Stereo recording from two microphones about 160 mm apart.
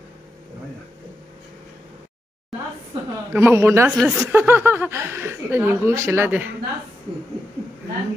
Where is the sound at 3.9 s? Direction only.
Centre (ahead or behind).